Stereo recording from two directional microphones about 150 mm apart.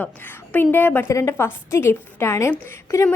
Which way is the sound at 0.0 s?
10° left (ahead or behind).